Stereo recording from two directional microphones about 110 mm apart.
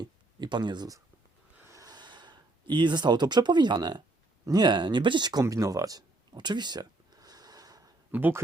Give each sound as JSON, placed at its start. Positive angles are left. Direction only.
{"t": 0.0, "sound": "a sound", "side_deg": -45}
{"t": 4.4, "sound": "speech", "side_deg": -40}
{"t": 8.1, "sound": "speech", "side_deg": -15}